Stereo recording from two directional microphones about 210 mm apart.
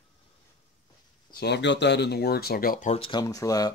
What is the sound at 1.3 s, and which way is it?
Speech, 55° left (ahead or behind).